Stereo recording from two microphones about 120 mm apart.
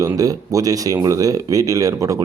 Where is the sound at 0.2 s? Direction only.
30° right (ahead or behind).